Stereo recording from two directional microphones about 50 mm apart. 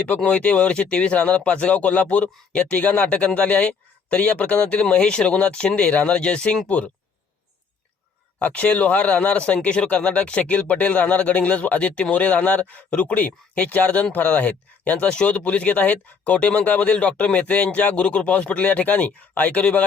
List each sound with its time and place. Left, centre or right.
0.3 s a man's voice: left
2.7 s a man's voice: left
8.4 s a man's voice: left
15.1 s a man's voice: left
16.3 s a man's voice: left